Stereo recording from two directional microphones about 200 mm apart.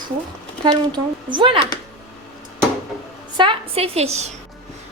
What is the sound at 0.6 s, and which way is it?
A woman's voice, 20° right (ahead or behind).